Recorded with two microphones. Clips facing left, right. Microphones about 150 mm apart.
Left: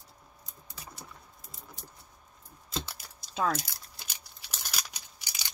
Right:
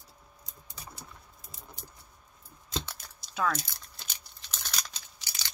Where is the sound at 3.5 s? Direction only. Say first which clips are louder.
Left 2 dB; 10° left (ahead or behind).